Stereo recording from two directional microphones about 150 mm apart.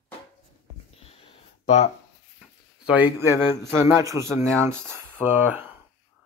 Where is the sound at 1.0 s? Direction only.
40° left (ahead or behind).